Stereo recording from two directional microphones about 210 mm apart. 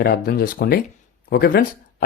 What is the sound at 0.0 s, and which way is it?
Speech, 45° left (ahead or behind).